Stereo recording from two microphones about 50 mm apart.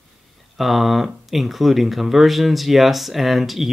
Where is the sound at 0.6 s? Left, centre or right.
Centre.